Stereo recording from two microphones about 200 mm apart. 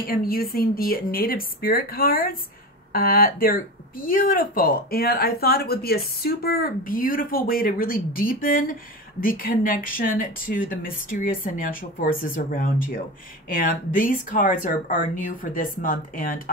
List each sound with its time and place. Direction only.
0.0 s speech: 50° left (ahead or behind)